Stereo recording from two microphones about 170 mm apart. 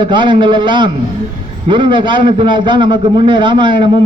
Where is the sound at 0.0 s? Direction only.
30° right (ahead or behind).